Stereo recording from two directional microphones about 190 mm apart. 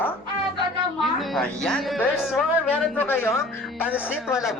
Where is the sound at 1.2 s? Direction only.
Centre (ahead or behind).